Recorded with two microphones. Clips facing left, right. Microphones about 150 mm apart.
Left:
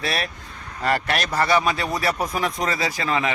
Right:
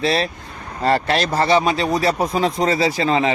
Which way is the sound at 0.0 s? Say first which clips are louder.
Right 7 dB; 25° right (ahead or behind).